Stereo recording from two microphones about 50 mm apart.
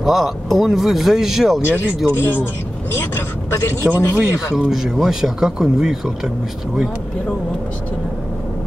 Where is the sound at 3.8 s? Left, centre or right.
Centre.